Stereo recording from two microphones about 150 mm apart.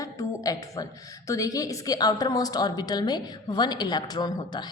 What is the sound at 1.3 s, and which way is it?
A woman's voice, 25° left (ahead or behind).